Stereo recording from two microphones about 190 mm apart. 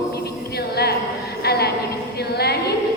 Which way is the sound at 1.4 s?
55° left (ahead or behind).